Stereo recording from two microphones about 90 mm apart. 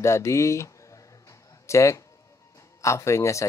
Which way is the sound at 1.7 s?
35° left (ahead or behind).